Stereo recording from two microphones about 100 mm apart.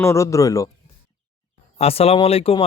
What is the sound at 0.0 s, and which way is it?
Speech, 30° left (ahead or behind).